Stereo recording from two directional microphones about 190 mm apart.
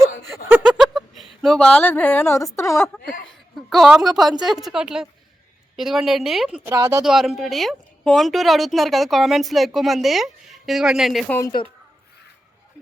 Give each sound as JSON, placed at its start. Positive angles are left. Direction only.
{"t": 0.3, "sound": "a sound", "side_deg": 0}
{"t": 3.1, "sound": "a woman's voice", "side_deg": 0}
{"t": 6.7, "sound": "speech", "side_deg": -20}
{"t": 7.0, "sound": "a woman's voice", "side_deg": 0}
{"t": 11.3, "sound": "a woman's voice", "side_deg": 15}